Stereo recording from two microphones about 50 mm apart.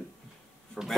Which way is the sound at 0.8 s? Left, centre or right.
Centre.